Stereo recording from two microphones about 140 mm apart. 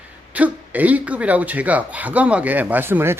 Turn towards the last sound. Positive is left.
turn(degrees=-15)  # may be behind; listen again after turning